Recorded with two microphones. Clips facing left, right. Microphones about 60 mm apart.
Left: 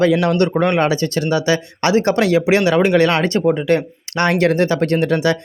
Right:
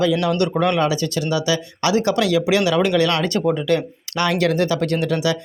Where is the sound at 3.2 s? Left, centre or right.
Left.